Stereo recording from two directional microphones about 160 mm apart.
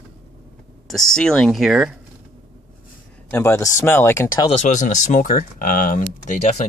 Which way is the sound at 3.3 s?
15° left (ahead or behind).